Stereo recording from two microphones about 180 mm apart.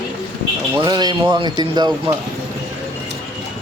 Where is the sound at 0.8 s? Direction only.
25° right (ahead or behind).